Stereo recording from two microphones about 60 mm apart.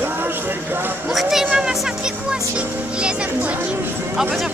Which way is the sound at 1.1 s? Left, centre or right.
Centre.